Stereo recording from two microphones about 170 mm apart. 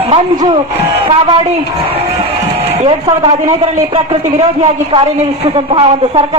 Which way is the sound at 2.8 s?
30° right (ahead or behind).